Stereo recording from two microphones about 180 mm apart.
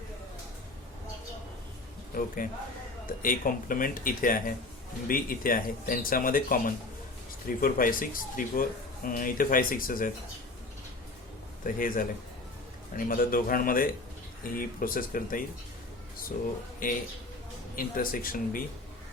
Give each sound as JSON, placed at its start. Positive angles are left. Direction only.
{"t": 2.1, "sound": "speech", "side_deg": 50}
{"t": 11.6, "sound": "speech", "side_deg": 50}
{"t": 16.8, "sound": "speech", "side_deg": 50}